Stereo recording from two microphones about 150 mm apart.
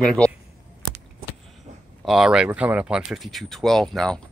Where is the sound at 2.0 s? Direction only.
5° right (ahead or behind).